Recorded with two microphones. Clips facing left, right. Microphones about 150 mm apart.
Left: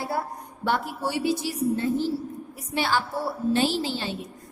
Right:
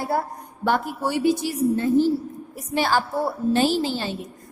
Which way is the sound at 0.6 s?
50° right (ahead or behind).